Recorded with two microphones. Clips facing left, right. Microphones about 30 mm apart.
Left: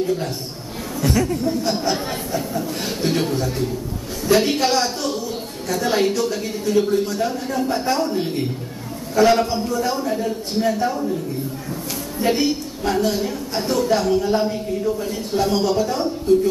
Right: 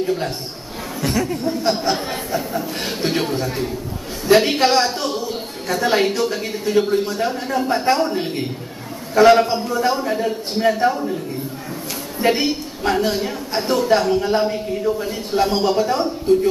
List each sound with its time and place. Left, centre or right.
0.0 s a man's voice: right
1.1 s speech: centre
1.4 s a woman's voice: right
12.2 s a woman's voice: right